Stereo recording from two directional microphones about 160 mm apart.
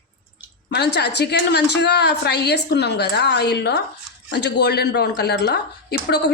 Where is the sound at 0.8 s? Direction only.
90° left.